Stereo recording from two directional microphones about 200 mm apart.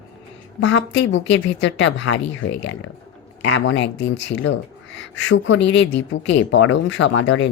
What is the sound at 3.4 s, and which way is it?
Speech, 80° left.